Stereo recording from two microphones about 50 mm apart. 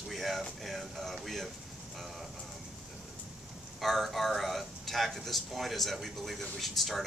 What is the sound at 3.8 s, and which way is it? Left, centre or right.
Speech, centre.